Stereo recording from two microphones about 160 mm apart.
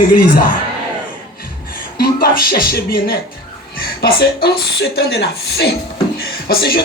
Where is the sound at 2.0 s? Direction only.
70° left (ahead or behind).